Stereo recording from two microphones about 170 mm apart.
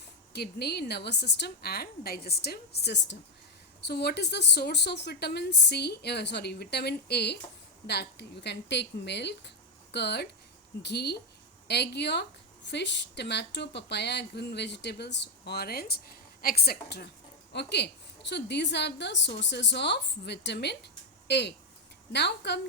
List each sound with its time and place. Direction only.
0.3 s a woman's voice: 70° left (ahead or behind)
17.5 s a woman's voice: 85° left